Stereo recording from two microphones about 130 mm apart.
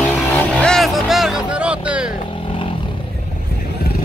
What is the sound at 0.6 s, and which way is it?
Music, centre (ahead or behind).